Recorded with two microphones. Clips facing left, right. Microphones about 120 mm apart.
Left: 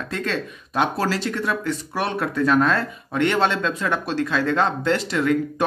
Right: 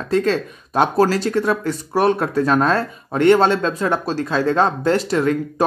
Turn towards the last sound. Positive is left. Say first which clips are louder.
# right 4 dB
turn(degrees=-35)  # may be behind; listen again after turning